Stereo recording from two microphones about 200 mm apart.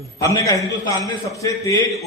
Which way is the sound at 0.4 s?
15° left (ahead or behind).